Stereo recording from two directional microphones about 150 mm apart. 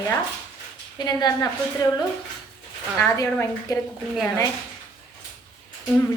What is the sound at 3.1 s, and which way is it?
Speech, 20° left (ahead or behind).